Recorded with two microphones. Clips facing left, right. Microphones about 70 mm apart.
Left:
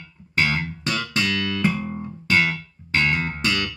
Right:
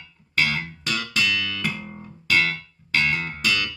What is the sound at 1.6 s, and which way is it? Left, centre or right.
Music, left.